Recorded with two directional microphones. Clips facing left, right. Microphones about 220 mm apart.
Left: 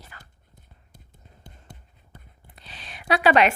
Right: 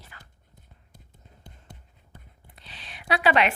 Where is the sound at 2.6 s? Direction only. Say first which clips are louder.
Left 4 dB; 45° left (ahead or behind).